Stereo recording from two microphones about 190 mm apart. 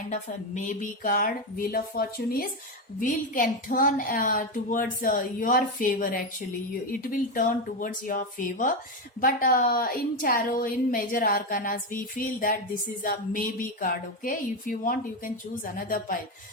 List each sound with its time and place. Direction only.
0.1 s a woman's voice: 40° left (ahead or behind)